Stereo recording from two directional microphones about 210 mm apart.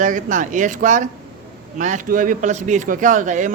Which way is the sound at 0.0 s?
40° right (ahead or behind).